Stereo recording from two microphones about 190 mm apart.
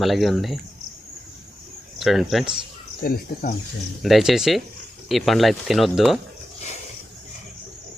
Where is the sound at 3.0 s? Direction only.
50° left (ahead or behind).